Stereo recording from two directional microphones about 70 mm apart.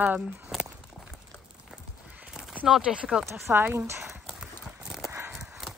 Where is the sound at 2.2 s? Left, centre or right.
Centre.